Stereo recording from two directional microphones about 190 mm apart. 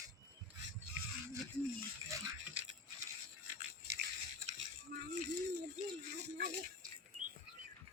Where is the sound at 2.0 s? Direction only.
15° right (ahead or behind).